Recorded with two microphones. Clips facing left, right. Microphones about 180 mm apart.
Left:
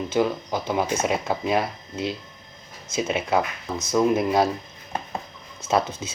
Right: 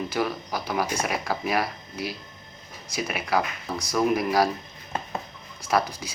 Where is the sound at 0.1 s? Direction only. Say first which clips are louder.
Left 5 dB; 20° left (ahead or behind).